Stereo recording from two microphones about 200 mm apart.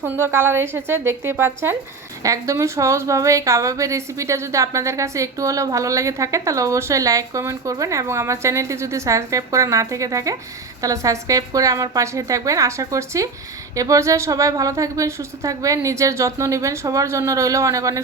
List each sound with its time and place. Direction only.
0.0 s a woman's voice: 10° right (ahead or behind)